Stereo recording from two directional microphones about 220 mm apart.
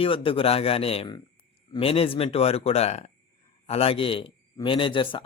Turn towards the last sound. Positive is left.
turn(degrees=20)  # may be behind; listen again after turning